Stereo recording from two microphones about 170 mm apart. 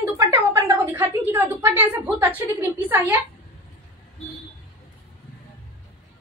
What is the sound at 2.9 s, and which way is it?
Speech, 10° right (ahead or behind).